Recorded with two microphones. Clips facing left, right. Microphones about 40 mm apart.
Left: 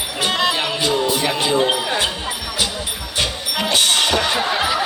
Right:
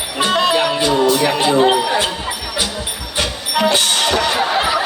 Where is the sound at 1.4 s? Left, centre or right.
Right.